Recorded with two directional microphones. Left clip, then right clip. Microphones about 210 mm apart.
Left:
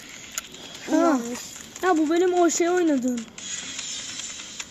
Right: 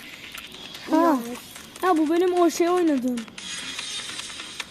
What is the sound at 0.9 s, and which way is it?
Speech, 10° right (ahead or behind).